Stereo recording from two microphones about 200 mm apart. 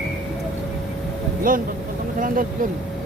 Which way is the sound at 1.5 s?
45° right (ahead or behind).